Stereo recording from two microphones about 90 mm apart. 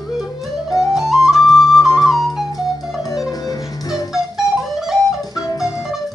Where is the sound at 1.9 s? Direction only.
40° left (ahead or behind).